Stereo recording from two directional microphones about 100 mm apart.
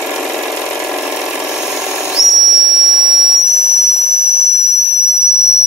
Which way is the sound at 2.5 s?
5° right (ahead or behind).